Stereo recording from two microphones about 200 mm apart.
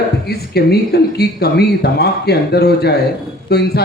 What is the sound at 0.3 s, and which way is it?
Speech, 55° left (ahead or behind).